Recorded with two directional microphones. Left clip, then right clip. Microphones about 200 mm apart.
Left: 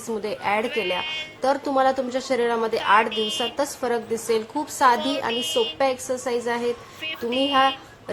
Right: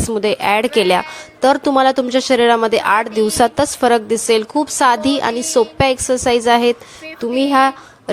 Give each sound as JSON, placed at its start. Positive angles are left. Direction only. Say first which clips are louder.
{"t": 0.2, "sound": "a woman's voice", "louder": "right 10 dB", "side_deg": -45}